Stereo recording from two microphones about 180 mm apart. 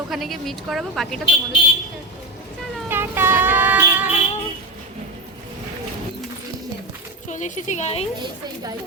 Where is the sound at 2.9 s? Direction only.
10° right (ahead or behind).